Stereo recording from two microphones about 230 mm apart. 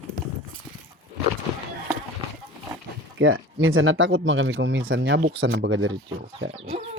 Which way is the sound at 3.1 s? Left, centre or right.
Right.